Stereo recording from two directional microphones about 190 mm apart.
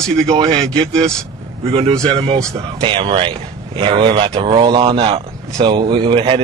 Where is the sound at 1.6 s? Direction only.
30° right (ahead or behind).